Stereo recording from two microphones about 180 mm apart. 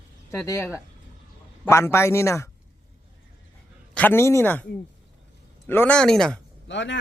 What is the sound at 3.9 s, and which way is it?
Speech, 10° left (ahead or behind).